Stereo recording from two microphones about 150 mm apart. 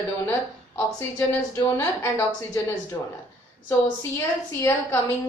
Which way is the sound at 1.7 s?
20° left (ahead or behind).